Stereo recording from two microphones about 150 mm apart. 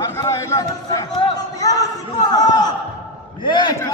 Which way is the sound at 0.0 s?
20° left (ahead or behind).